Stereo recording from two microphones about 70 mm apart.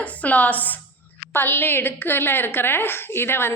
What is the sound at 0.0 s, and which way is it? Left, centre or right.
A woman's voice, left.